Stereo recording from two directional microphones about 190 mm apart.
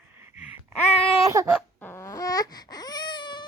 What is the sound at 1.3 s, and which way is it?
Baby cry, 15° right (ahead or behind).